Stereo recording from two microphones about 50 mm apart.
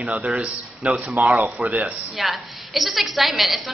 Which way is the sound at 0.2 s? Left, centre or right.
Centre.